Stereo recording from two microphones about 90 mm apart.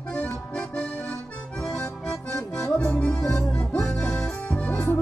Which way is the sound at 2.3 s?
10° left (ahead or behind).